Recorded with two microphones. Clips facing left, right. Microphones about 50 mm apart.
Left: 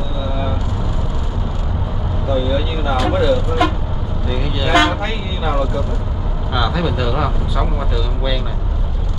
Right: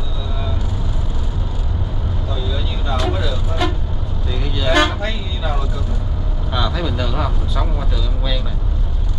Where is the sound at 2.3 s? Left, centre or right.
Left.